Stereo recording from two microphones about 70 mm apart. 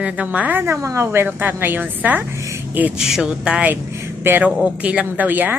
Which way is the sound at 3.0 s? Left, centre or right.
Centre.